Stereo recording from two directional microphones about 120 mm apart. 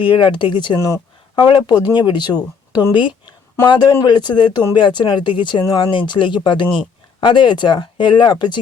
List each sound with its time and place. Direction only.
0.0 s speech: 40° left (ahead or behind)
0.8 s speech: 25° left (ahead or behind)
1.4 s speech: 40° left (ahead or behind)